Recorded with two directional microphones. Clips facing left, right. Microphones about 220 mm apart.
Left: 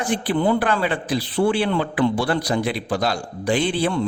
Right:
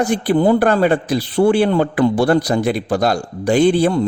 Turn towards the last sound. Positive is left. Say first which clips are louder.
# right 8 dB
turn(degrees=-40)  # may be behind; listen again after turning